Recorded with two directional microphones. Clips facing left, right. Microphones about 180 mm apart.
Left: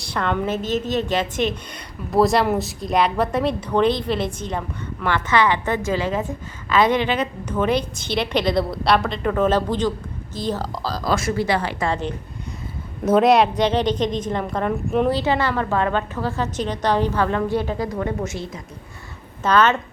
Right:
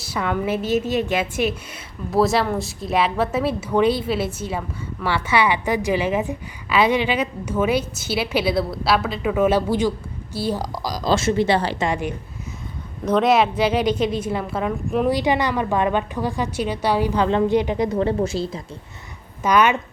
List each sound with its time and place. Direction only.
0.0 s a woman's voice: 5° right (ahead or behind)
11.1 s a woman's voice: 25° right (ahead or behind)
11.9 s a woman's voice: 10° right (ahead or behind)
13.1 s a woman's voice: centre (ahead or behind)
15.1 s a woman's voice: 15° right (ahead or behind)
17.2 s a woman's voice: 20° right (ahead or behind)
19.4 s a woman's voice: 10° right (ahead or behind)